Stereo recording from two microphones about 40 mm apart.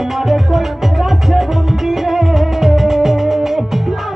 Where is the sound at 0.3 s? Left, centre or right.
Centre.